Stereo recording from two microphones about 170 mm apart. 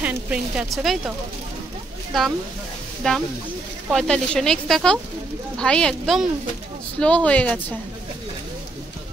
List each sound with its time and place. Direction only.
0.0 s speech: 5° right (ahead or behind)
3.0 s speech: 5° left (ahead or behind)